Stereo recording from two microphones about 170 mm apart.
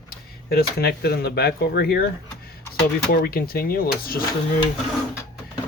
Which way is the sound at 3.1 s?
65° left (ahead or behind).